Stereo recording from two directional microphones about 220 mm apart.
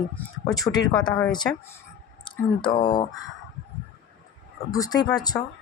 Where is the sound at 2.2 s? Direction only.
20° left (ahead or behind).